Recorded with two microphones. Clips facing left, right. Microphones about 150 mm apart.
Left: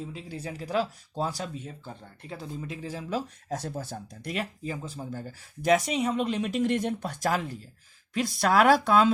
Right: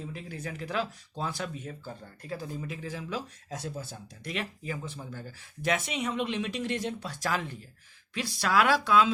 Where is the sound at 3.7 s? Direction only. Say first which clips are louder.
Left 4 dB; 55° left (ahead or behind).